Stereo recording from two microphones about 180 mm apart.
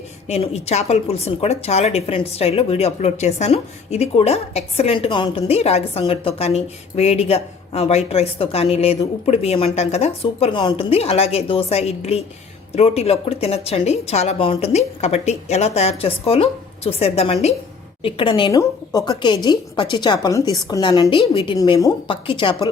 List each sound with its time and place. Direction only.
0.3 s a woman's voice: 35° left (ahead or behind)